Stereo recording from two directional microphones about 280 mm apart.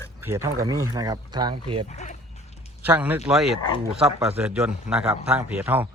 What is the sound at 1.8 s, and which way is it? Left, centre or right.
Dog, left.